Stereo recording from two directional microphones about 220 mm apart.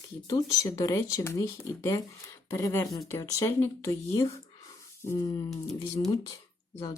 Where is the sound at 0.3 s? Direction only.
15° left (ahead or behind).